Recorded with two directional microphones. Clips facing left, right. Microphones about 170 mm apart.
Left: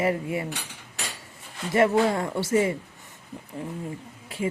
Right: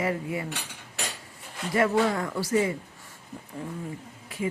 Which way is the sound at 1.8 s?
25° left (ahead or behind).